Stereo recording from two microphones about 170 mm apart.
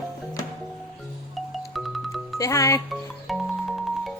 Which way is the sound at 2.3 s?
20° left (ahead or behind).